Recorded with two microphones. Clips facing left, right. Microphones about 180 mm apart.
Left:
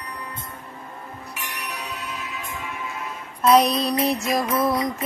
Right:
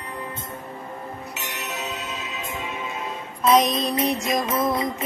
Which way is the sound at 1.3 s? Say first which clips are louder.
Left 2 dB; 25° right (ahead or behind).